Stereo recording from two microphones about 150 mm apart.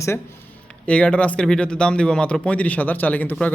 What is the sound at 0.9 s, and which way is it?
Speech, 10° left (ahead or behind).